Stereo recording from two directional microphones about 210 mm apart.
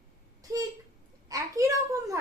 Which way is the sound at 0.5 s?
15° right (ahead or behind).